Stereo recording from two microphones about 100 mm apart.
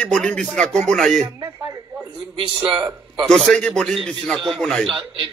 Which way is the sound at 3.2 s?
Centre (ahead or behind).